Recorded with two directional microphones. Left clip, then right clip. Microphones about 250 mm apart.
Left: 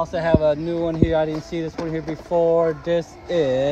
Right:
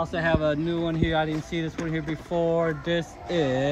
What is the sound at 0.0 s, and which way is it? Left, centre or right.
Speech, left.